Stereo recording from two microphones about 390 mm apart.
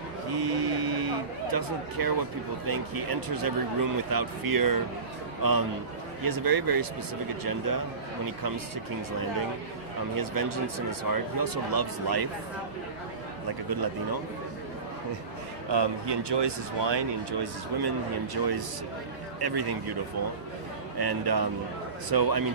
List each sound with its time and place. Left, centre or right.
0.3 s a sound: right
2.6 s speech: right
10.1 s speech: right
15.7 s a man's voice: right
21.0 s a man's voice: right